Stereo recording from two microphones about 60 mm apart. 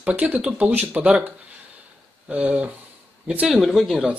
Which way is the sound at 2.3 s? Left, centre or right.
Right.